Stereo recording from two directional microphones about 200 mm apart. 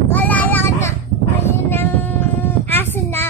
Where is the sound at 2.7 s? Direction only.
10° left (ahead or behind).